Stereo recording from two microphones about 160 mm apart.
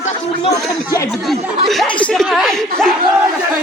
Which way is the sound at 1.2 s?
Centre (ahead or behind).